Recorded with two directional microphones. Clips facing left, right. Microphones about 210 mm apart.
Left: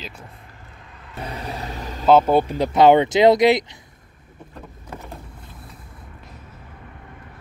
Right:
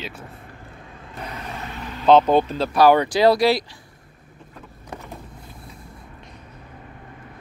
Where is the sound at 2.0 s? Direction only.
5° left (ahead or behind).